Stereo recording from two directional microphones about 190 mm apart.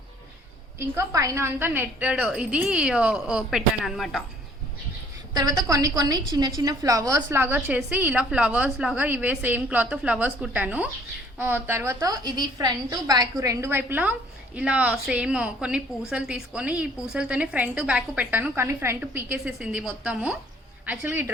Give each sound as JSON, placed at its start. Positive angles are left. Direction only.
{"t": 0.8, "sound": "a woman's voice", "side_deg": -15}
{"t": 5.3, "sound": "a woman's voice", "side_deg": -20}